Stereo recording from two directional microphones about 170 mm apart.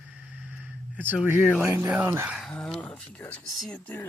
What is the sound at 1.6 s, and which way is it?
Speech, 10° right (ahead or behind).